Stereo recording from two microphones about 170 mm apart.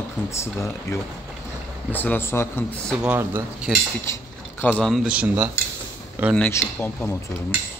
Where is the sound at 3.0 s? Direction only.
10° right (ahead or behind).